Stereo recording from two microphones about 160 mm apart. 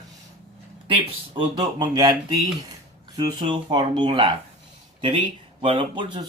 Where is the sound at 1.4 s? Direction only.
25° right (ahead or behind).